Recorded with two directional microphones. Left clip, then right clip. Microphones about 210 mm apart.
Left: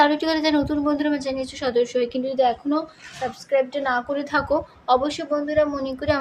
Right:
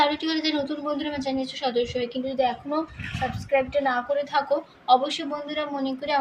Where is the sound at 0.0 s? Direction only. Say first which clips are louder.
Left 4 dB; 40° left (ahead or behind).